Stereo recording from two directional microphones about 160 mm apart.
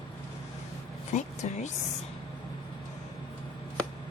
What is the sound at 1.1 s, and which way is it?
Speech, 45° left (ahead or behind).